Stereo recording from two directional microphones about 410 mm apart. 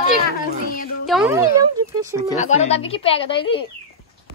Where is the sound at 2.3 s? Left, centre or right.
Centre.